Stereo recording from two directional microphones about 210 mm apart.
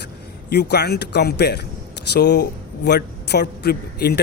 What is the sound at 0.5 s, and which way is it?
A man's voice, 50° left (ahead or behind).